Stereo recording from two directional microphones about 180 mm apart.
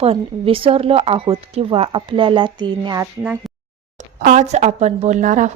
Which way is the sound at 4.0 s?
45° right (ahead or behind).